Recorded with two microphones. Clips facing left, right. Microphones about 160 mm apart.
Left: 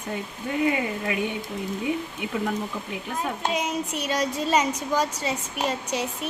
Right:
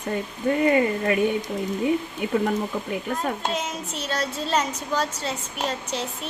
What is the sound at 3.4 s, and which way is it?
A woman's voice, 10° left (ahead or behind).